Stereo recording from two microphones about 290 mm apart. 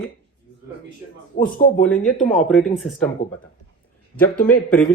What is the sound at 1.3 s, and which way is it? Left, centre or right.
Speech, left.